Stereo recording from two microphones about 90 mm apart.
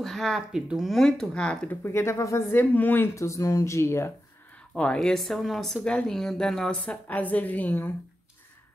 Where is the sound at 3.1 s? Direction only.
35° left (ahead or behind).